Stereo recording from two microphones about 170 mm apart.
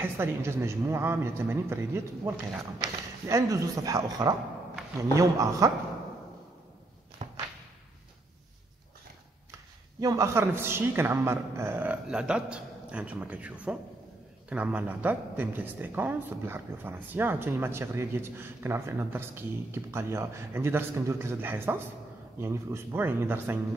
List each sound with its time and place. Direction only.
0.0 s a woman's voice: 15° right (ahead or behind)
7.2 s whip: 45° right (ahead or behind)
9.9 s a woman's voice: 20° right (ahead or behind)